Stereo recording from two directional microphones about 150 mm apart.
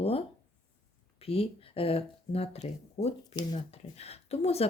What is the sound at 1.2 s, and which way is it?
Speech, 40° left (ahead or behind).